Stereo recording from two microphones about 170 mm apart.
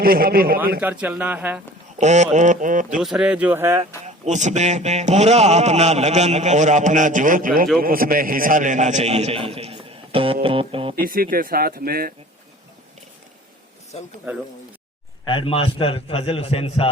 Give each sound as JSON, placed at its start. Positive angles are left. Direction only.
{"t": 0.0, "sound": "speech", "side_deg": -60}
{"t": 0.8, "sound": "speech", "side_deg": -10}
{"t": 2.0, "sound": "a man's voice", "side_deg": -45}
{"t": 3.0, "sound": "speech", "side_deg": -5}
{"t": 4.0, "sound": "a man's voice", "side_deg": -45}
{"t": 10.4, "sound": "music", "side_deg": -30}
{"t": 11.0, "sound": "speech", "side_deg": -55}
{"t": 14.3, "sound": "speech", "side_deg": -10}
{"t": 15.3, "sound": "a man's voice", "side_deg": 30}